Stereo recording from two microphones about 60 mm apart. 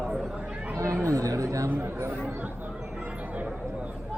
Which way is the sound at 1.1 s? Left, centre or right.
Right.